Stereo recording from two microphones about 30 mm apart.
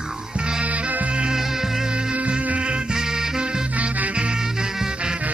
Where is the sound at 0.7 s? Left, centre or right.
Right.